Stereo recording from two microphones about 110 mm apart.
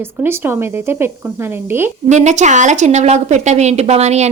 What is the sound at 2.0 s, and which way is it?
A woman's voice, 90° right.